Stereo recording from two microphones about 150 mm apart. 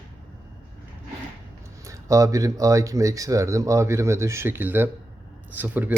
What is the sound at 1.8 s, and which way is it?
Speech, 20° right (ahead or behind).